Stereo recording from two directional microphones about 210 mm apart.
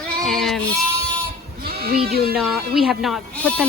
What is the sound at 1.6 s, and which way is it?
Sheep, 45° right (ahead or behind).